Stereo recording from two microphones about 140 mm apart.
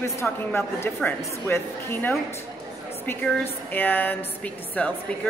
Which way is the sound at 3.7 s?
15° left (ahead or behind).